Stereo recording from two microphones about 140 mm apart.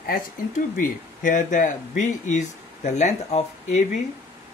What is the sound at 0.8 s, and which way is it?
Speech, 65° left (ahead or behind).